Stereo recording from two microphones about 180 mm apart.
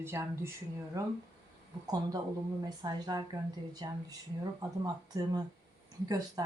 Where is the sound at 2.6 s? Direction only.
20° right (ahead or behind).